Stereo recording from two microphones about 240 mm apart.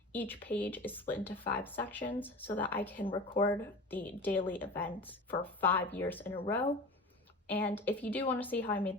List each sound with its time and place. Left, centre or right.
0.1 s a woman's voice: centre
3.1 s speech: left
3.4 s a woman's voice: centre
7.4 s a woman's voice: centre